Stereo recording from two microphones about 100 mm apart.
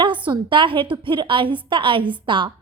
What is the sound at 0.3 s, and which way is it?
A woman's voice, 55° right (ahead or behind).